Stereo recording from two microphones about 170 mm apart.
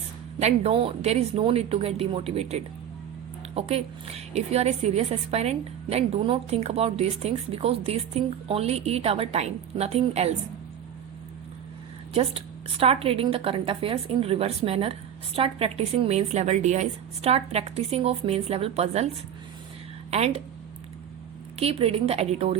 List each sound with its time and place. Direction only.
0.3 s a woman's voice: 40° right (ahead or behind)
12.1 s a woman's voice: 35° right (ahead or behind)
21.6 s a woman's voice: 35° right (ahead or behind)